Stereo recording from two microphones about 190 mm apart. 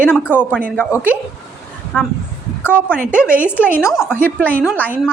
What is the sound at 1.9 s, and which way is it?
Speech, 5° left (ahead or behind).